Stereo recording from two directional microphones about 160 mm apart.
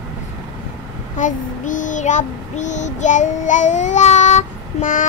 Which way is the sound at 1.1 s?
50° left (ahead or behind).